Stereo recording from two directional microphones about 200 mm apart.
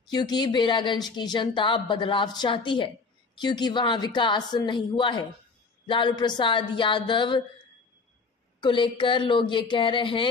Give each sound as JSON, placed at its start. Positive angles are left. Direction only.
{"t": 0.1, "sound": "a woman's voice", "side_deg": 20}
{"t": 8.5, "sound": "a woman's voice", "side_deg": 25}